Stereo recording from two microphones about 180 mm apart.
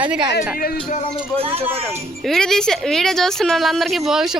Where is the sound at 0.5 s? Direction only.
55° left (ahead or behind).